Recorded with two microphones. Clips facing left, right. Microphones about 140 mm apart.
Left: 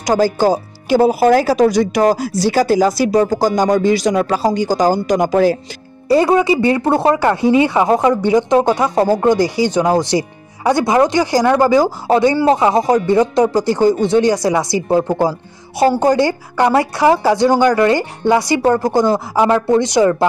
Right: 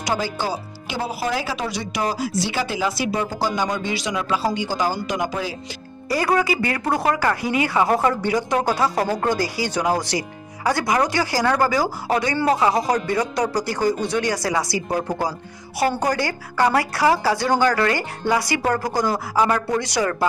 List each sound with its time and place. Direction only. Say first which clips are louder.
0.0 s speech: left 11 dB; 40° left (ahead or behind)
6.0 s speech: left 8 dB; 25° left (ahead or behind)